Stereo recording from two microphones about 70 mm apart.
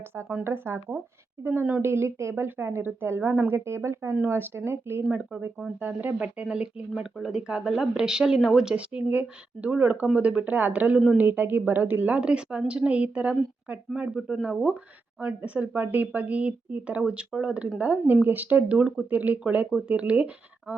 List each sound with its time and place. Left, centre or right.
0.4 s speech: right
5.3 s a woman's voice: centre
5.8 s speech: right
6.1 s speech: centre
8.7 s a woman's voice: centre